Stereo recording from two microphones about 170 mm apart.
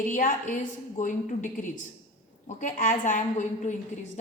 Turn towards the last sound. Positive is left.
turn(degrees=45)  # may be behind; listen again after turning